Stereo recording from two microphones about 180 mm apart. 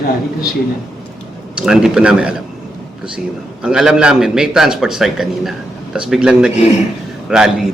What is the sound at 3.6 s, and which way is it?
A man's voice, 5° right (ahead or behind).